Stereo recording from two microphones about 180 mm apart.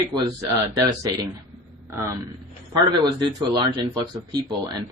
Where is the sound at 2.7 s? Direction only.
25° right (ahead or behind).